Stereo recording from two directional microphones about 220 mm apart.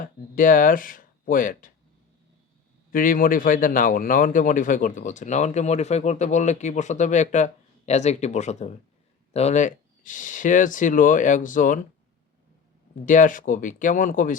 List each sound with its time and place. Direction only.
0.0 s speech: 40° left (ahead or behind)
2.9 s a man's voice: 40° left (ahead or behind)
13.1 s a man's voice: 35° left (ahead or behind)